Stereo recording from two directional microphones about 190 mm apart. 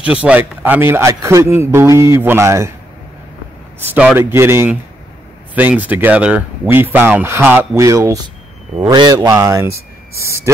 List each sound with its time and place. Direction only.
0.0 s speech: 5° right (ahead or behind)
3.9 s speech: 10° right (ahead or behind)